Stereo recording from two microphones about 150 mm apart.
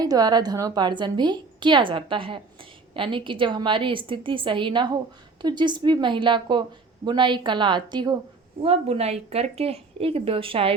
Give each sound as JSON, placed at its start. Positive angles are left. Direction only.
{"t": 0.0, "sound": "a woman's voice", "side_deg": -25}
{"t": 8.6, "sound": "a woman's voice", "side_deg": -40}